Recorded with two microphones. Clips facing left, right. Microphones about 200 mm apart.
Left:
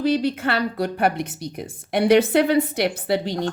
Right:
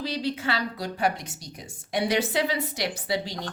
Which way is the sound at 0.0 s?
55° left (ahead or behind).